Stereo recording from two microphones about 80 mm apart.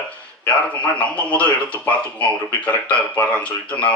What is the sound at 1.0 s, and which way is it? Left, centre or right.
Speech, centre.